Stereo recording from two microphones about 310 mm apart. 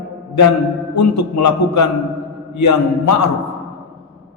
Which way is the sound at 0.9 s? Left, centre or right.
Left.